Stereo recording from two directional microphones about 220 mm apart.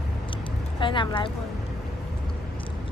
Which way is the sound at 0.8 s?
20° left (ahead or behind).